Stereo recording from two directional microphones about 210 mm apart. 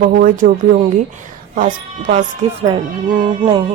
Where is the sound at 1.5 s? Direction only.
35° right (ahead or behind).